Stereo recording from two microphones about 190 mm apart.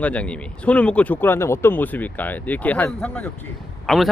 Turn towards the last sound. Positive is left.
turn(degrees=0)  # may be behind; listen again after turning